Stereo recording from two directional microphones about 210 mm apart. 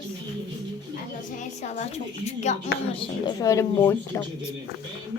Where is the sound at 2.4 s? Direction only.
35° left (ahead or behind).